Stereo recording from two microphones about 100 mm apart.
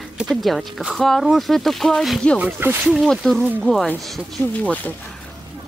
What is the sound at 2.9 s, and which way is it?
Speech, centre (ahead or behind).